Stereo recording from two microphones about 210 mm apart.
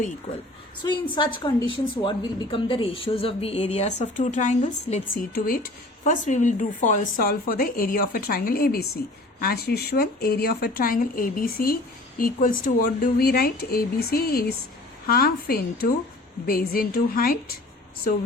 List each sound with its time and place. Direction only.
0.8 s a woman's voice: 20° left (ahead or behind)
5.3 s speech: 45° left (ahead or behind)